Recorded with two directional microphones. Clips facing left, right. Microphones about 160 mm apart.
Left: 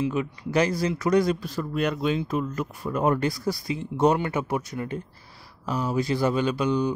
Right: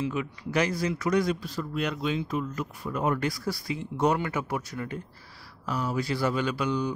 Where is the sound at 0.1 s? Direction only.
30° left (ahead or behind).